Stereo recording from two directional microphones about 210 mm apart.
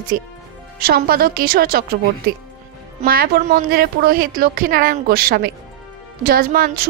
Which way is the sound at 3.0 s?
45° right (ahead or behind).